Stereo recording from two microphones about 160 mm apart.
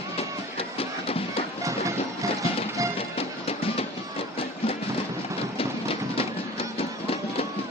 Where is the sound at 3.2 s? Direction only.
35° left (ahead or behind).